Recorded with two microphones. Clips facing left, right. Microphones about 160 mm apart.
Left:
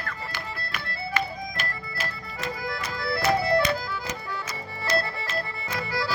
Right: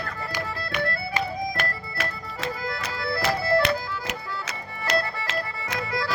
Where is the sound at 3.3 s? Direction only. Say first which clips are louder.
Even; 20° left (ahead or behind).